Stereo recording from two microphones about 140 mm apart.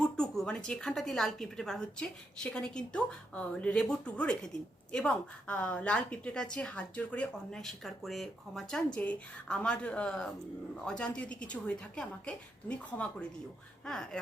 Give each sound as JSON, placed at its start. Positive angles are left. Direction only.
{"t": 0.0, "sound": "a woman's voice", "side_deg": 5}